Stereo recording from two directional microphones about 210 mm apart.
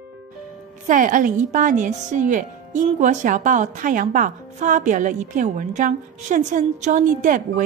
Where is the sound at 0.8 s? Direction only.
40° right (ahead or behind).